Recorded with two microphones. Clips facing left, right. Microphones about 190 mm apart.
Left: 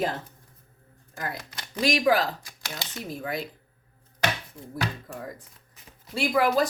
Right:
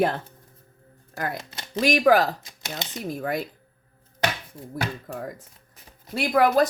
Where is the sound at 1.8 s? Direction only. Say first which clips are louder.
Right 4 dB; 50° right (ahead or behind).